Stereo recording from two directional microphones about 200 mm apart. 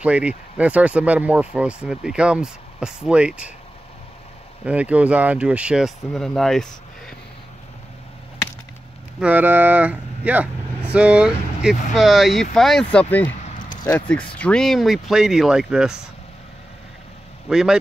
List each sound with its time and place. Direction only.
0.0 s speech: 5° right (ahead or behind)
4.6 s speech: 5° right (ahead or behind)
9.2 s speech: 10° right (ahead or behind)
13.4 s a sound: 35° left (ahead or behind)
13.8 s speech: 5° left (ahead or behind)
17.5 s speech: 5° right (ahead or behind)